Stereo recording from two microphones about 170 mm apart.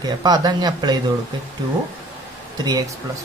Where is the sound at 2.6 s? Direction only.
20° right (ahead or behind).